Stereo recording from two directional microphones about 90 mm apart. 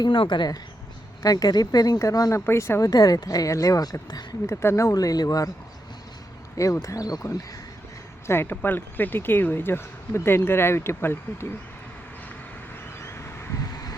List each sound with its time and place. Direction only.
0.0 s a woman's voice: 65° left (ahead or behind); by 2.4 s 40° left (ahead or behind)
2.5 s speech: 30° left (ahead or behind)
2.8 s speech: 45° left (ahead or behind)
6.8 s speech: 40° left (ahead or behind)
8.3 s speech: 25° left (ahead or behind)
13.0 s vehicle: 30° left (ahead or behind)